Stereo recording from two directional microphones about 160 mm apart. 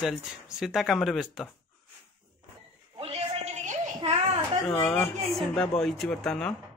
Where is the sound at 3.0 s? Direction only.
40° right (ahead or behind).